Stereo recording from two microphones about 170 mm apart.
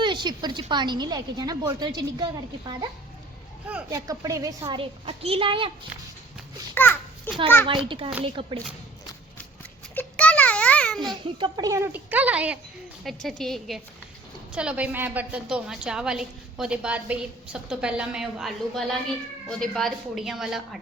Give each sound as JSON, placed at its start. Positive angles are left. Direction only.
{"t": 0.0, "sound": "speech", "side_deg": -25}
{"t": 4.8, "sound": "a woman's voice", "side_deg": -35}
{"t": 6.7, "sound": "a child's voice", "side_deg": 10}
{"t": 7.7, "sound": "a woman's voice", "side_deg": -30}
{"t": 9.9, "sound": "a sound", "side_deg": 10}
{"t": 11.0, "sound": "a woman's voice", "side_deg": -25}